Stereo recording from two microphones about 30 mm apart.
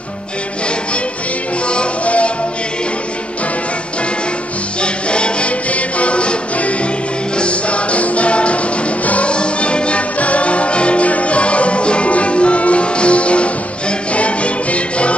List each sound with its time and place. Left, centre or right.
2.0 s music: left
4.8 s music: left
5.7 s music: left
9.0 s music: left
9.3 s music: left